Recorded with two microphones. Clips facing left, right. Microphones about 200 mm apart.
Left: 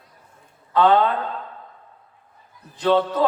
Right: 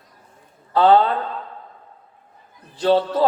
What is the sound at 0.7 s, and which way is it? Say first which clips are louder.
Speech: right 2 dB; 35° right (ahead or behind).